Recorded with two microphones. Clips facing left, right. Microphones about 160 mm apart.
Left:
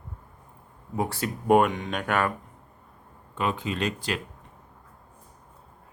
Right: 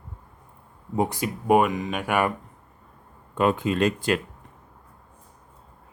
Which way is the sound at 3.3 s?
50° right (ahead or behind).